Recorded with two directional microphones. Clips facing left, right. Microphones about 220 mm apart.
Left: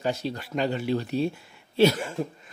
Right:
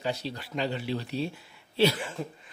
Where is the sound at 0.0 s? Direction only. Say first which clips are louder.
Left 4 dB; 45° left (ahead or behind).